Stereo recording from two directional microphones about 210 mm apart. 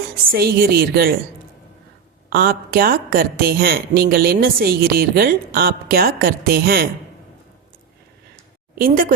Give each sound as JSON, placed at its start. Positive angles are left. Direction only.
{"t": 0.3, "sound": "a woman's voice", "side_deg": -45}
{"t": 2.3, "sound": "a woman's voice", "side_deg": -45}
{"t": 8.7, "sound": "a woman's voice", "side_deg": -40}